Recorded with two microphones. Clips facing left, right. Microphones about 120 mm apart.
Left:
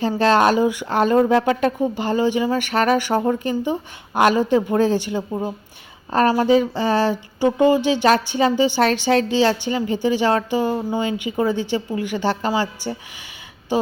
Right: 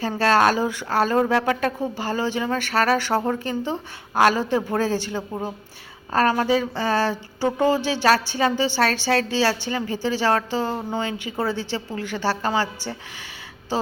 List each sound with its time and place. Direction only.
0.0 s speech: 20° left (ahead or behind)
6.4 s speech: 15° left (ahead or behind)